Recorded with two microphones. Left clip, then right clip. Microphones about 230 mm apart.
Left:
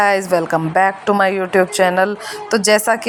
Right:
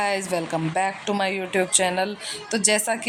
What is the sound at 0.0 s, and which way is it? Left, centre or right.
A woman's voice, left.